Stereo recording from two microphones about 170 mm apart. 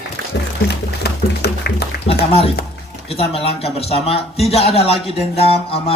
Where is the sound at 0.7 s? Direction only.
75° left (ahead or behind).